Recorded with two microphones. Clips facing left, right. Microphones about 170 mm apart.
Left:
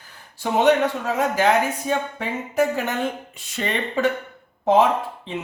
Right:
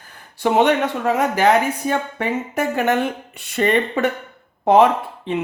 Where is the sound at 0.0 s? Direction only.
60° right (ahead or behind).